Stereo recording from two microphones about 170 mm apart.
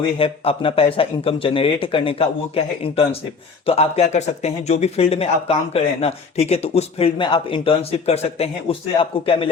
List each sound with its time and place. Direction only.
0.2 s speech: 35° left (ahead or behind)